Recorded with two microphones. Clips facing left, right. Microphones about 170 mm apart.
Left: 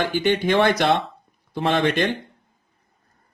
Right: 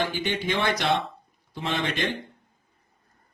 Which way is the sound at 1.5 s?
80° left.